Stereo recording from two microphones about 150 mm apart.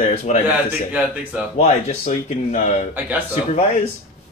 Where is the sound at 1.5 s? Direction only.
50° left (ahead or behind).